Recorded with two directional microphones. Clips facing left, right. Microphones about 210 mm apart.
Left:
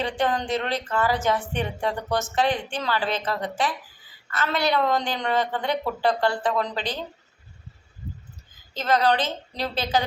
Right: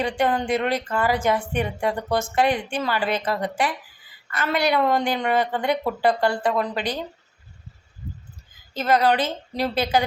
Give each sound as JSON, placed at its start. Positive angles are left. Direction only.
{"t": 0.0, "sound": "speech", "side_deg": -10}
{"t": 8.7, "sound": "speech", "side_deg": -10}